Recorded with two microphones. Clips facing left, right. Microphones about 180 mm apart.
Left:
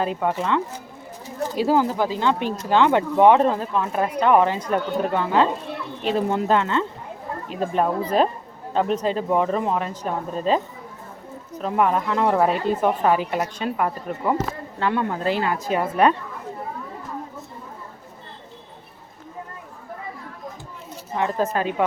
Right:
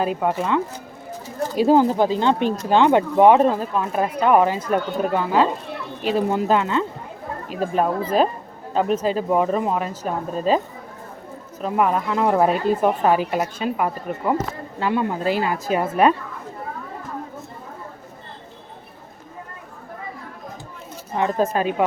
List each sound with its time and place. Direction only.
0.2 s speech: 10° right (ahead or behind)
11.6 s speech: 5° right (ahead or behind)
21.2 s speech: 15° right (ahead or behind)